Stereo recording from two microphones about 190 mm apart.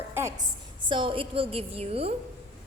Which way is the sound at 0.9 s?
25° right (ahead or behind).